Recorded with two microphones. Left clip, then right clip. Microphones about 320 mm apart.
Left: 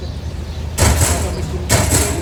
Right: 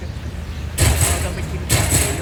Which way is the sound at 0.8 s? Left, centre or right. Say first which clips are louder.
Left 3 dB; left.